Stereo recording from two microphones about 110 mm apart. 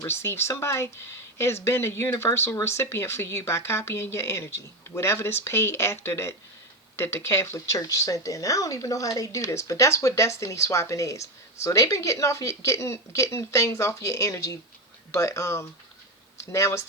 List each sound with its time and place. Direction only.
0.0 s speech: 25° left (ahead or behind)